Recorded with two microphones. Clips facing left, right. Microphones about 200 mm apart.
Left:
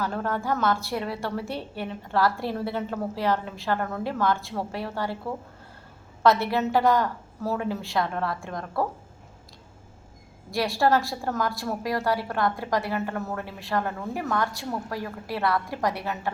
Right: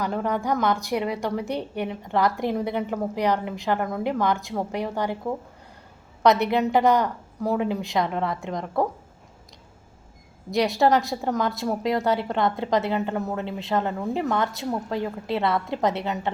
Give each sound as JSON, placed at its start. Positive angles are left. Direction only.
{"t": 0.0, "sound": "a woman's voice", "side_deg": -15}
{"t": 10.5, "sound": "a woman's voice", "side_deg": -20}